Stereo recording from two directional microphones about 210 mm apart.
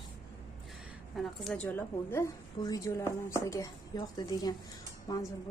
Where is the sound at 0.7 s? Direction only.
Centre (ahead or behind).